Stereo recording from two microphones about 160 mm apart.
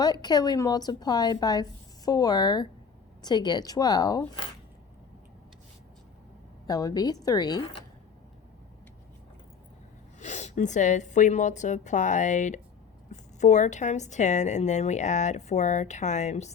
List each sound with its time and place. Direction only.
0.0 s a woman's voice: 25° left (ahead or behind)
6.7 s a woman's voice: 20° left (ahead or behind)
10.2 s a woman's voice: 45° left (ahead or behind)